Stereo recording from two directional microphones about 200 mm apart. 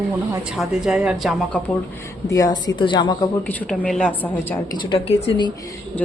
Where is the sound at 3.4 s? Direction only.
5° left (ahead or behind).